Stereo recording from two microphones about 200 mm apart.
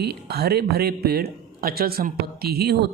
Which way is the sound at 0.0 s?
55° right (ahead or behind).